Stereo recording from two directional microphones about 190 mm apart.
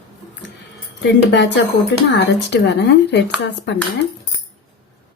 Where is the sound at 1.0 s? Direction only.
65° left (ahead or behind).